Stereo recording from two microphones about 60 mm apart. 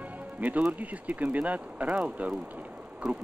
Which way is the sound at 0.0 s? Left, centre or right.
Right.